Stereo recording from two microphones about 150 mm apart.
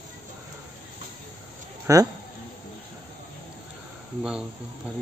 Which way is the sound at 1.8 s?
20° right (ahead or behind).